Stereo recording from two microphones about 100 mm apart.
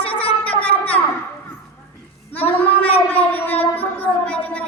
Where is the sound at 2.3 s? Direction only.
15° left (ahead or behind).